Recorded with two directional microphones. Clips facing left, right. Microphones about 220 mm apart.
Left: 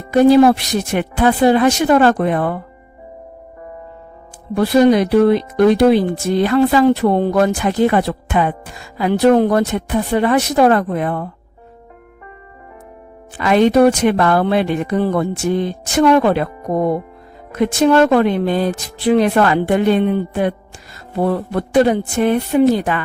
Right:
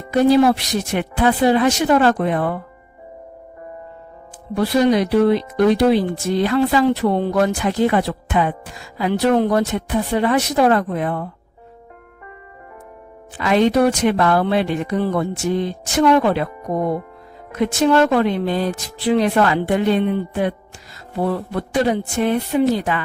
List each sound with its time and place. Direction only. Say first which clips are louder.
0.1 s speech: left 4 dB; 50° left (ahead or behind)
4.5 s speech: left 4 dB; 50° left (ahead or behind)
13.3 s speech: left 3 dB; 55° left (ahead or behind)
17.7 s speech: left 3 dB; 55° left (ahead or behind)